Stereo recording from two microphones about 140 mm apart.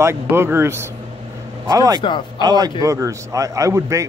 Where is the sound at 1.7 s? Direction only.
25° right (ahead or behind).